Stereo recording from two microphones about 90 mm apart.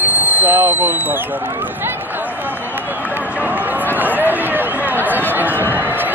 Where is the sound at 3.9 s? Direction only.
20° right (ahead or behind).